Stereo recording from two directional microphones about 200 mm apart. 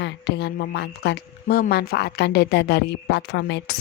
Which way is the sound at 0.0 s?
60° left (ahead or behind).